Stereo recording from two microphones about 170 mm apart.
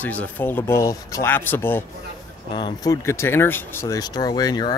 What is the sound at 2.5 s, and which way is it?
Speech, 25° left (ahead or behind).